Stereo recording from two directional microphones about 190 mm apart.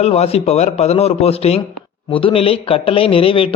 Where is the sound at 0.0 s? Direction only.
35° left (ahead or behind).